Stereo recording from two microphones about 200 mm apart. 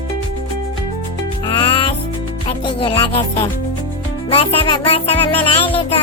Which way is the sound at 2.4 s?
25° left (ahead or behind).